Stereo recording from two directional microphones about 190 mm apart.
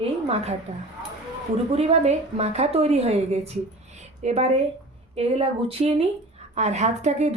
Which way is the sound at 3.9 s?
35° right (ahead or behind).